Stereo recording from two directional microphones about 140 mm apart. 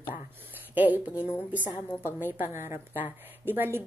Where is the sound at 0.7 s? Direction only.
10° right (ahead or behind).